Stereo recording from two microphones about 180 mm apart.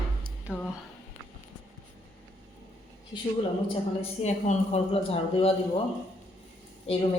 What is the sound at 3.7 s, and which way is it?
A woman's voice, 35° left (ahead or behind).